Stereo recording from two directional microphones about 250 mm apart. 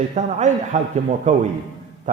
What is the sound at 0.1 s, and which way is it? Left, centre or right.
A man's voice, right.